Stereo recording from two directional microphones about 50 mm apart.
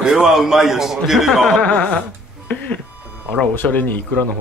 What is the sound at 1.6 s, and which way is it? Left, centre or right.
Speech, left.